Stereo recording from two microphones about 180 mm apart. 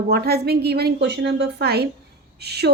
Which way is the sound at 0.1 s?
60° right (ahead or behind).